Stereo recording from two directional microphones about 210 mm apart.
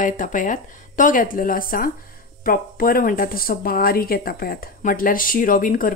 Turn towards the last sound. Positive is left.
turn(degrees=40)  # may be behind; listen again after turning